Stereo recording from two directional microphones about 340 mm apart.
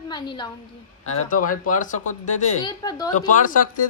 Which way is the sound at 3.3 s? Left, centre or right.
Left.